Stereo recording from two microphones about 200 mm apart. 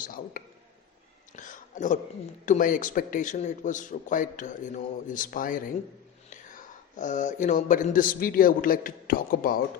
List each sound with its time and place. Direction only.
0.0 s a man's voice: 45° left (ahead or behind)
7.0 s a man's voice: 40° left (ahead or behind)